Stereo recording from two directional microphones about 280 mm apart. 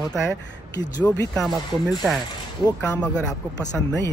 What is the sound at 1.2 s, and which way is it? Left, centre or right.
Speech, centre.